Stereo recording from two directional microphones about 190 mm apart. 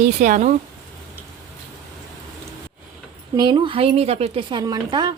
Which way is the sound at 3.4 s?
25° right (ahead or behind).